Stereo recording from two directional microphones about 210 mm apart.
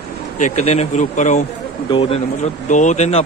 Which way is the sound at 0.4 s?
30° left (ahead or behind).